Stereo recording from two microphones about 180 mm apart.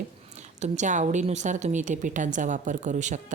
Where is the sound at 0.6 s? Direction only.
40° right (ahead or behind).